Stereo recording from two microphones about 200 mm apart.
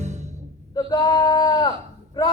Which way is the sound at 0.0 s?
35° right (ahead or behind).